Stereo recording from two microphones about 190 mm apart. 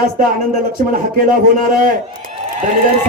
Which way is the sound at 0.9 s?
45° right (ahead or behind).